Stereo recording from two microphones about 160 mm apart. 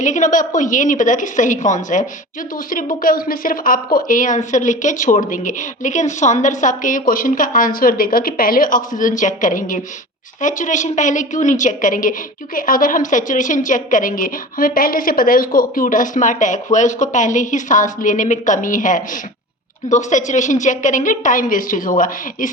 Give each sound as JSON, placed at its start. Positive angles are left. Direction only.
{"t": 0.0, "sound": "a woman's voice", "side_deg": 50}